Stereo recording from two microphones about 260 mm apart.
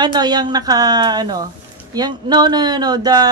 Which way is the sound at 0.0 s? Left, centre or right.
Centre.